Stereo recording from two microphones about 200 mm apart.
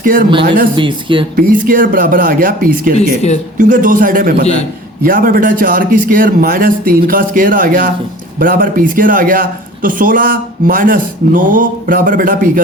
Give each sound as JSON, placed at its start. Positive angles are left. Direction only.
{"t": 0.0, "sound": "speech", "side_deg": -45}
{"t": 0.8, "sound": "speech", "side_deg": -25}
{"t": 1.4, "sound": "speech", "side_deg": -45}